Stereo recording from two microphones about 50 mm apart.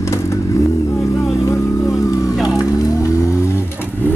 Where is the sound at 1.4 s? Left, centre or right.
Left.